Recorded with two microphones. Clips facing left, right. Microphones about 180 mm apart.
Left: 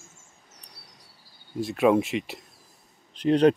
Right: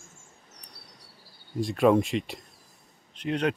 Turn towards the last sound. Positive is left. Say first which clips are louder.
# left 8 dB
turn(degrees=35)  # may be behind; listen again after turning